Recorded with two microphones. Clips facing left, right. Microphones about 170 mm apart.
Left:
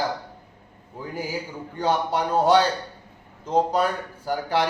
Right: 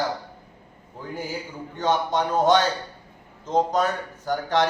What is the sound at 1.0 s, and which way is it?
A man's voice, 10° left (ahead or behind).